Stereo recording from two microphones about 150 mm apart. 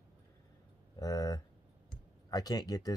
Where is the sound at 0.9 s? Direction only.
25° left (ahead or behind).